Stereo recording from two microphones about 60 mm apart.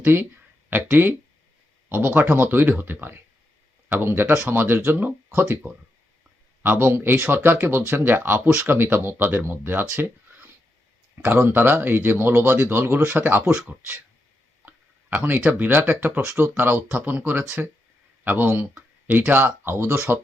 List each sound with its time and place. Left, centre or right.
0.0 s speech: right
6.6 s speech: right
11.4 s speech: right
13.1 s speech: right
14.6 s a sound: right
15.1 s speech: right
19.6 s speech: right